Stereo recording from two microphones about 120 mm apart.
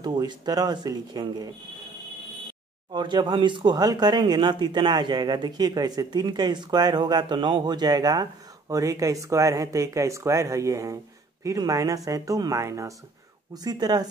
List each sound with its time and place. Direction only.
0.0 s speech: 35° right (ahead or behind)
2.9 s speech: 40° right (ahead or behind)